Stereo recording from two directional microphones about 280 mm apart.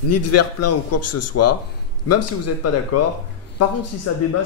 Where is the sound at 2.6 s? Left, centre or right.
Left.